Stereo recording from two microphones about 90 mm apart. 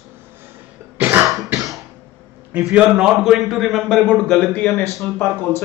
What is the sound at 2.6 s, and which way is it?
A man's voice, 10° right (ahead or behind).